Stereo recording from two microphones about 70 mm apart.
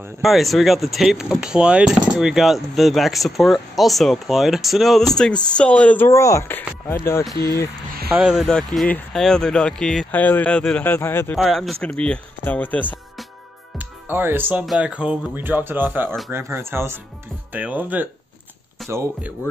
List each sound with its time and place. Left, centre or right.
0.2 s speech: centre
6.0 s speech: left
8.2 s speech: centre
8.5 s speech: centre
10.1 s speech: left
11.0 s speech: left
11.3 s speech: centre
11.8 s speech: centre
13.7 s music: right
14.8 s speech: centre
15.3 s speech: right
17.5 s speech: right
18.8 s a sound: centre